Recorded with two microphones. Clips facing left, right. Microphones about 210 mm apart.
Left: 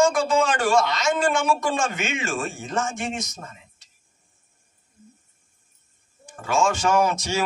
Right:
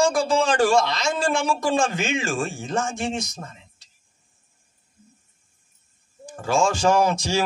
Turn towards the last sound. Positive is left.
turn(degrees=-30)  # may be behind; listen again after turning